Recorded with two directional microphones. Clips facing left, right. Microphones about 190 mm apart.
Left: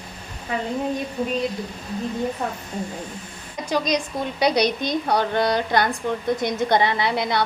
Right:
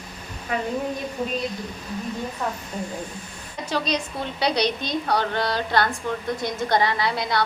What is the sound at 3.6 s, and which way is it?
A woman's voice, 15° left (ahead or behind).